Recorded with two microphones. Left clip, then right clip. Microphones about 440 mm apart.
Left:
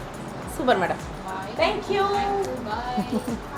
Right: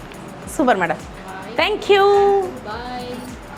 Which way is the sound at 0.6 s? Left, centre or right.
Right.